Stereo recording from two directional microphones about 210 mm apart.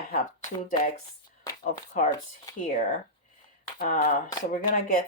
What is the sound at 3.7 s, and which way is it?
Speech, 35° left (ahead or behind).